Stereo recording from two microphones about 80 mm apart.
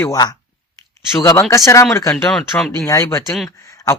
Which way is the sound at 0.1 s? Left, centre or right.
Left.